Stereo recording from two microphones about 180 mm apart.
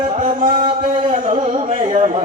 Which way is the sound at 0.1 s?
40° right (ahead or behind).